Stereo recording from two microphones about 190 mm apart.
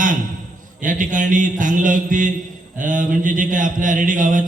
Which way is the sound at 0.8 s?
45° right (ahead or behind).